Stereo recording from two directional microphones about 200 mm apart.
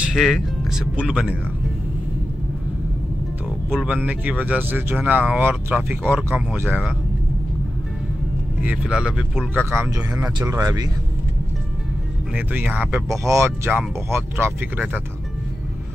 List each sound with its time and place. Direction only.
0.0 s speech: centre (ahead or behind)
3.7 s speech: 5° right (ahead or behind)
8.6 s speech: 5° right (ahead or behind)
12.4 s speech: 5° right (ahead or behind)